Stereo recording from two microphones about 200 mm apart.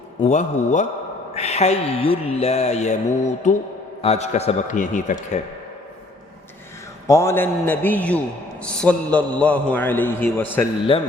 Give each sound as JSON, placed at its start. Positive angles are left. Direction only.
{"t": 0.3, "sound": "speech", "side_deg": 35}
{"t": 7.1, "sound": "a man's voice", "side_deg": 15}
{"t": 10.9, "sound": "speech", "side_deg": 25}